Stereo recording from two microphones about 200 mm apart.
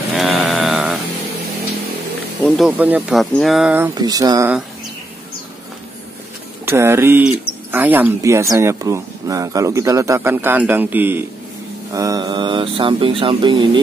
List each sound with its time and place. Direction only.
0.1 s a sound: centre (ahead or behind)
2.4 s speech: centre (ahead or behind)
3.9 s speech: 20° right (ahead or behind)
6.6 s speech: 10° right (ahead or behind)